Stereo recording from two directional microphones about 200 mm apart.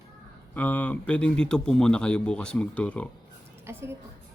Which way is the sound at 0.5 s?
10° left (ahead or behind).